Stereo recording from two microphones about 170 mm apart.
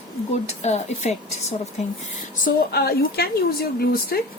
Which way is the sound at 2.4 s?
60° left (ahead or behind).